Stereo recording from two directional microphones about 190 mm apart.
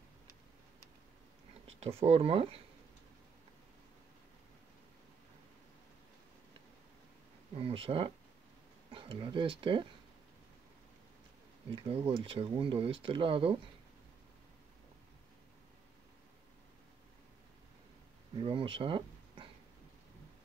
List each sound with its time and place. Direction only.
1.8 s speech: 30° right (ahead or behind)
7.5 s speech: 30° right (ahead or behind)
11.7 s speech: 25° right (ahead or behind)
18.4 s speech: 30° right (ahead or behind)